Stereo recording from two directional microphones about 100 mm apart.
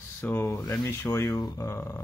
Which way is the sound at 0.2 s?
20° left (ahead or behind).